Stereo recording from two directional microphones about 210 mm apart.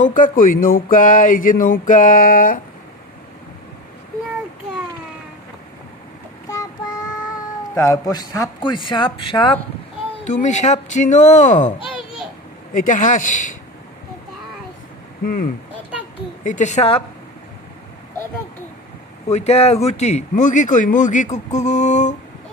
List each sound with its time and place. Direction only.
0.0 s speech: 40° left (ahead or behind)
6.5 s child singing: 15° left (ahead or behind)
7.7 s a man's voice: 15° left (ahead or behind)
10.2 s speech: 35° left (ahead or behind)
12.7 s speech: 40° left (ahead or behind)
15.2 s speech: 40° left (ahead or behind)
19.2 s speech: 30° left (ahead or behind)